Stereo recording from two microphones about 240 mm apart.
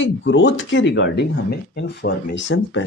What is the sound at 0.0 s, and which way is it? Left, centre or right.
Speech, left.